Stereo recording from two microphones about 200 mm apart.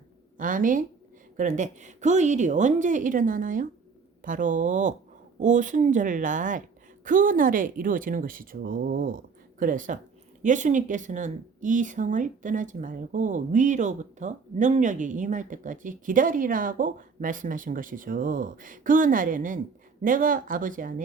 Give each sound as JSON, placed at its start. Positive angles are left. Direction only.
{"t": 0.3, "sound": "a woman's voice", "side_deg": -40}